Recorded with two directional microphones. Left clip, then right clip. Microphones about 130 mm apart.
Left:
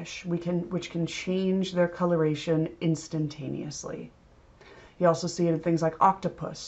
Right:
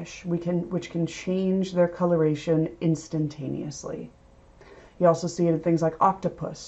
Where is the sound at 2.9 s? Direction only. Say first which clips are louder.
Right 3 dB; centre (ahead or behind).